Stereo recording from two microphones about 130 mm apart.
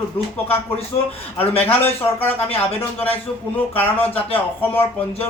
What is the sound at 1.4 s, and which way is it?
Speech, 50° left (ahead or behind).